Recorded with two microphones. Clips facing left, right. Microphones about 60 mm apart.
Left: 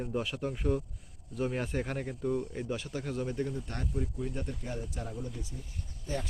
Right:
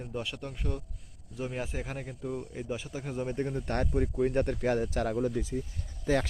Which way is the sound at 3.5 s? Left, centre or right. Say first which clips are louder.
Right 7 dB; right.